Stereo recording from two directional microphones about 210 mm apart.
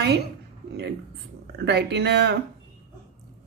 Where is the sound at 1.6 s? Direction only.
55° right (ahead or behind).